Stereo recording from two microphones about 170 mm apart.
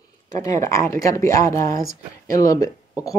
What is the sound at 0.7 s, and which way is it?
Speech, 20° left (ahead or behind).